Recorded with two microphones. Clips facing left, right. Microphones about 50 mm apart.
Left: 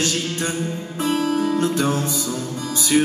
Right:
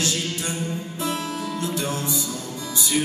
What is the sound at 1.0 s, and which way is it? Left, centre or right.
Music, left.